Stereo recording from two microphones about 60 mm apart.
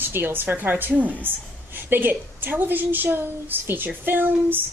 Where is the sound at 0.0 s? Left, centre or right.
Right.